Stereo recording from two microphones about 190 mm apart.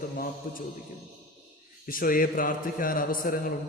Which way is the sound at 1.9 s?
50° left (ahead or behind).